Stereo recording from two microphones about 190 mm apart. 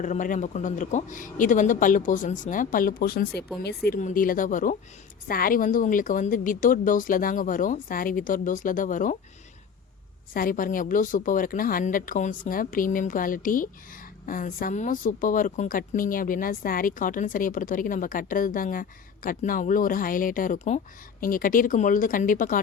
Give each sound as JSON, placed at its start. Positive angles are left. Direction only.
{"t": 0.0, "sound": "a woman's voice", "side_deg": 40}
{"t": 10.3, "sound": "a woman's voice", "side_deg": 45}